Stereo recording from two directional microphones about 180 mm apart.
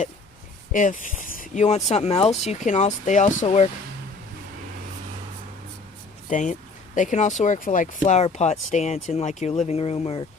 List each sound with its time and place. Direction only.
0.7 s speech: 45° left (ahead or behind)
6.3 s speech: 45° left (ahead or behind)